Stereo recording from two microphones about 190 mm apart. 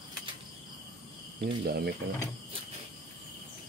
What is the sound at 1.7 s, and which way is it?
Speech, 55° right (ahead or behind).